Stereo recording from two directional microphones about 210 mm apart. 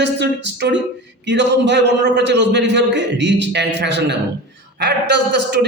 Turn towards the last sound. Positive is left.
turn(degrees=-55)  # may be behind; listen again after turning